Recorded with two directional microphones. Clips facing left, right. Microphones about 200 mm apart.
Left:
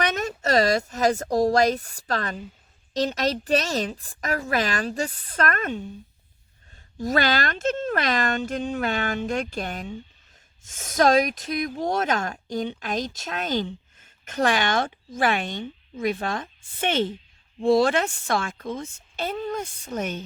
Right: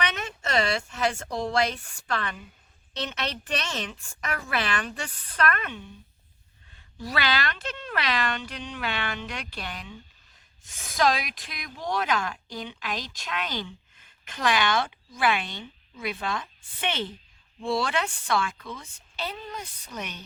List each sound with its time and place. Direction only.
0.0 s a woman's voice: 40° left (ahead or behind)
7.0 s speech: 45° left (ahead or behind)